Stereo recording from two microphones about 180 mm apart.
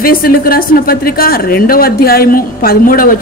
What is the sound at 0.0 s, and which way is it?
A woman's voice, 55° left (ahead or behind).